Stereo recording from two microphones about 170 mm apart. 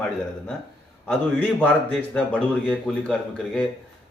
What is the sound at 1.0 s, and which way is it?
A man's voice, 10° left (ahead or behind).